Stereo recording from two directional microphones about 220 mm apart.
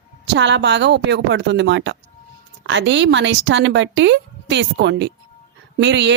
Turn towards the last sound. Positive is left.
turn(degrees=-55)  # may be behind; listen again after turning